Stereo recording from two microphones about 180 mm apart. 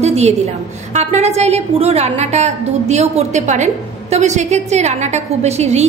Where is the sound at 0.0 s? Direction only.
35° right (ahead or behind).